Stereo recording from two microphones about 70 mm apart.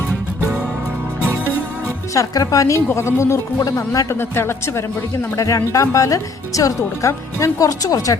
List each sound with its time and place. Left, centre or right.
2.1 s speech: left
3.6 s speech: left
4.1 s a woman's voice: left
5.4 s speech: left